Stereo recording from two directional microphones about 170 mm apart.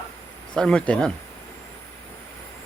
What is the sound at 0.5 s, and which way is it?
Speech, 5° left (ahead or behind).